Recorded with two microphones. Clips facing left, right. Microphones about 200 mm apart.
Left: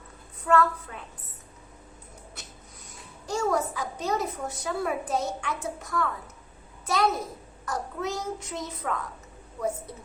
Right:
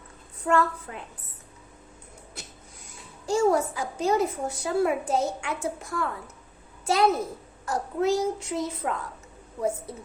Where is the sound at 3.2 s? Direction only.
30° right (ahead or behind).